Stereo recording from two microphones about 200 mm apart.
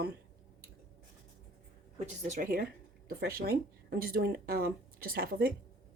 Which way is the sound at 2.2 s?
40° right (ahead or behind).